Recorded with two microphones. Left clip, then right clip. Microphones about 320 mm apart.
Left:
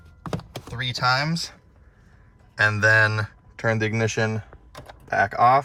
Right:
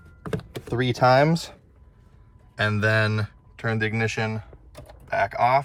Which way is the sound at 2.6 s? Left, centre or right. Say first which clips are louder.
Left 5 dB; centre.